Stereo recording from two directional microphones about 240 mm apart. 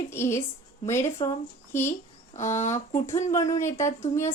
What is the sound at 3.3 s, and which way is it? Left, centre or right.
A woman's voice, centre.